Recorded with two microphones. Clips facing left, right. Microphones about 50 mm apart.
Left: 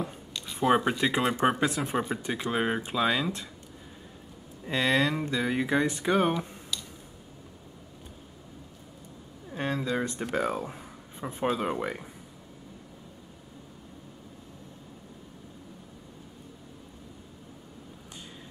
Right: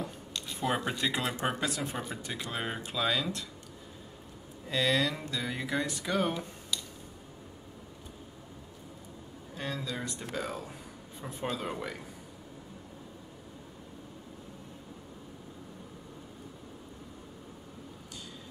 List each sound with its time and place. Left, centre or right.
0.7 s speech: centre
4.6 s speech: left
9.5 s a sound: left
11.5 s speech: left